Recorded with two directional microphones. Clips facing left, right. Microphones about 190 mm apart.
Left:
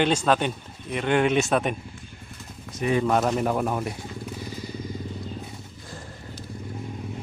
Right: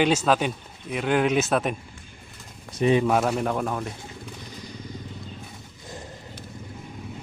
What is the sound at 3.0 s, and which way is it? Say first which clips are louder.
Speech: even; 5° right (ahead or behind).